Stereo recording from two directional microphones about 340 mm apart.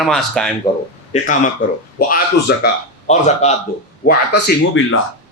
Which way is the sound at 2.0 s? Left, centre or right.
Left.